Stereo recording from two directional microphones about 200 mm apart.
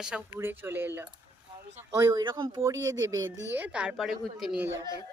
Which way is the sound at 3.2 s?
70° right (ahead or behind).